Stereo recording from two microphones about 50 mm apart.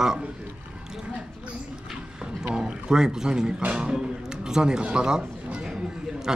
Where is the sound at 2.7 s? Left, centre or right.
Centre.